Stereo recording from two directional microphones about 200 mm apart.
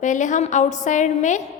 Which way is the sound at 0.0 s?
40° left (ahead or behind).